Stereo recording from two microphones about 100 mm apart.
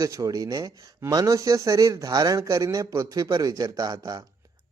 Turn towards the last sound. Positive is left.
turn(degrees=-40)  # may be behind; listen again after turning